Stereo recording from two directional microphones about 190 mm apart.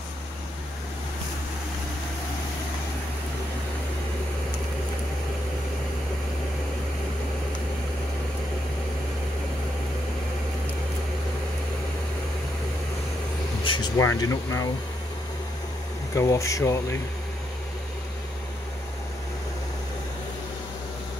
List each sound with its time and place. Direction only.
13.9 s speech: 15° left (ahead or behind)
16.2 s speech: 15° left (ahead or behind)